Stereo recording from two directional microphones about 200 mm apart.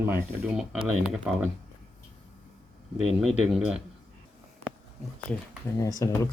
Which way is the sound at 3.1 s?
Centre (ahead or behind).